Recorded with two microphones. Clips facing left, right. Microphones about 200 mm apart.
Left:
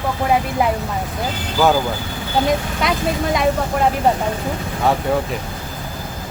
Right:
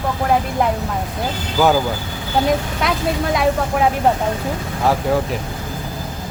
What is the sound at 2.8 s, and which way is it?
Speech, centre (ahead or behind).